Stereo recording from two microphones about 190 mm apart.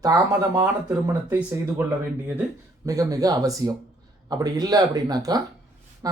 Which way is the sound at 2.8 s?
15° right (ahead or behind).